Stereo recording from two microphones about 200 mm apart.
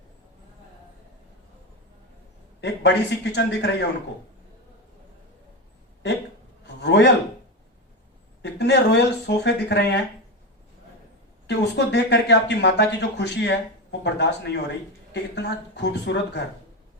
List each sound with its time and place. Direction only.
2.6 s speech: 60° left (ahead or behind)
6.8 s a man's voice: 60° left (ahead or behind)
8.4 s speech: 60° left (ahead or behind)
11.4 s speech: 60° left (ahead or behind)